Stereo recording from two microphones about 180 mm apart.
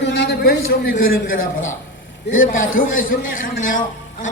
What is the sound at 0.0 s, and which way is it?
A man's voice, 75° left (ahead or behind).